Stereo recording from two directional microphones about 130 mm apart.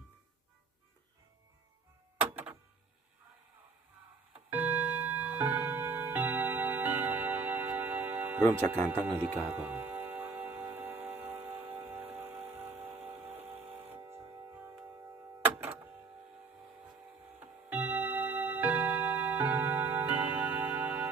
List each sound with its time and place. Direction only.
2.3 s a sound: 15° right (ahead or behind)
4.4 s music: 15° right (ahead or behind)
8.9 s speech: 15° right (ahead or behind)
10.0 s music: 15° right (ahead or behind)
15.4 s music: 15° right (ahead or behind)
17.7 s music: 15° right (ahead or behind)